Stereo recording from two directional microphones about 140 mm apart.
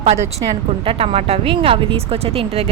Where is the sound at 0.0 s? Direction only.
50° right (ahead or behind).